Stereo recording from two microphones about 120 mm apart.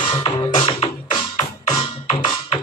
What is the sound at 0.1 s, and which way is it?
Music, 40° left (ahead or behind).